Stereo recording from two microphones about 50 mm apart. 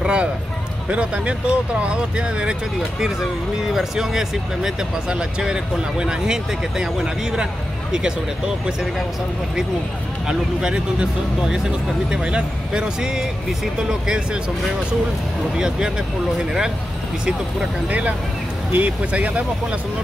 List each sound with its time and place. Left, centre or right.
0.0 s speech: centre
3.6 s speech: centre
10.2 s speech: centre
15.5 s speech: centre
17.8 s speech: right